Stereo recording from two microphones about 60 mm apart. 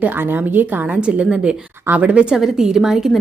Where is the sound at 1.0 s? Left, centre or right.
Centre.